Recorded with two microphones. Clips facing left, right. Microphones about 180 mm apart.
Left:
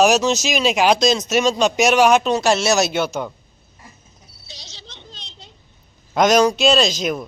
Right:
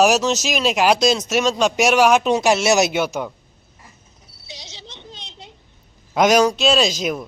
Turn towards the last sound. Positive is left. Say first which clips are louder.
# left 1 dB
turn(degrees=-5)  # may be behind; listen again after turning